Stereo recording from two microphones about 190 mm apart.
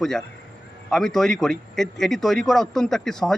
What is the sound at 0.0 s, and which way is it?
A man's voice, centre (ahead or behind).